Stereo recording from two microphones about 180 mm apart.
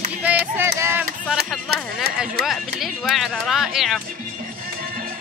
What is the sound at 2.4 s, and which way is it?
Speech, centre (ahead or behind).